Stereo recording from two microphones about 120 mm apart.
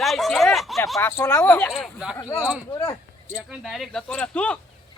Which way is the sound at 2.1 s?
25° left (ahead or behind).